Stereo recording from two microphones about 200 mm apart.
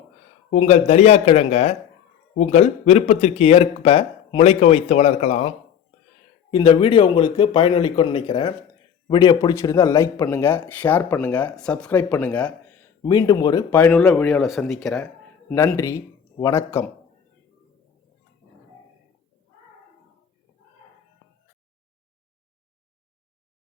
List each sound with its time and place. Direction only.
0.5 s speech: 35° left (ahead or behind); by 12.5 s 5° left (ahead or behind)
13.0 s speech: 20° left (ahead or behind); by 15.0 s centre (ahead or behind)
15.4 s speech: 15° left (ahead or behind)